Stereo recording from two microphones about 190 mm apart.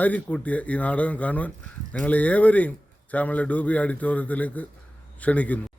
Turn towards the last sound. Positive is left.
turn(degrees=10)  # may be behind; listen again after turning